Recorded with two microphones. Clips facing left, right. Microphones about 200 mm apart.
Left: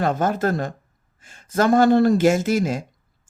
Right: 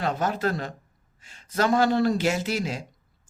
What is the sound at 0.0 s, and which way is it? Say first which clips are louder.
Speech: left 5 dB; 50° left (ahead or behind).